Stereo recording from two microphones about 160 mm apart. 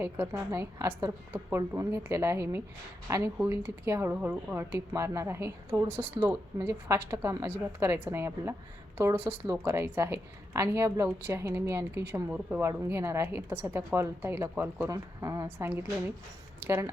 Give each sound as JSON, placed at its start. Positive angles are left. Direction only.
{"t": 0.0, "sound": "a woman's voice", "side_deg": -15}